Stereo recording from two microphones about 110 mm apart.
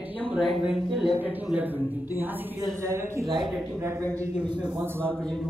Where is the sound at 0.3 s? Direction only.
5° right (ahead or behind).